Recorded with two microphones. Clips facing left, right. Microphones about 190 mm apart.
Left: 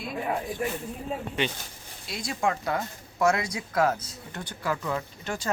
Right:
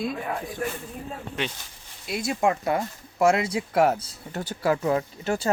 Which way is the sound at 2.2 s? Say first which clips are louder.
Right 4 dB; 25° right (ahead or behind).